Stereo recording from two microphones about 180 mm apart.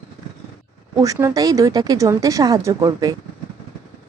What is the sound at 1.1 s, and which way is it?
Speech, 20° right (ahead or behind).